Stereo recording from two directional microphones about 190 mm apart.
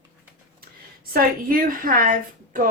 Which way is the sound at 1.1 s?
50° right (ahead or behind).